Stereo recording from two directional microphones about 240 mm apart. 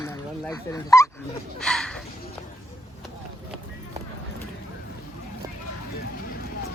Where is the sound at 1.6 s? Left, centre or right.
Centre.